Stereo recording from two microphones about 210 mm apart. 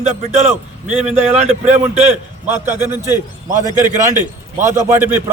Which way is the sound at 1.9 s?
30° right (ahead or behind).